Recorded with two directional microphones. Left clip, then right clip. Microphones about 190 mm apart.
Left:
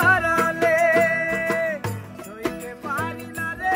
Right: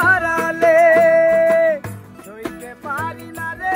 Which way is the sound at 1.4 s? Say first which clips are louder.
Right 10 dB; 35° right (ahead or behind).